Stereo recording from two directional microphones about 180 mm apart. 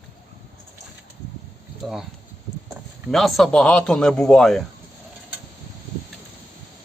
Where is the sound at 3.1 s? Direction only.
Centre (ahead or behind).